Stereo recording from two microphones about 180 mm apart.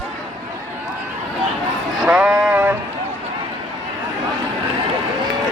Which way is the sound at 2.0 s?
5° right (ahead or behind).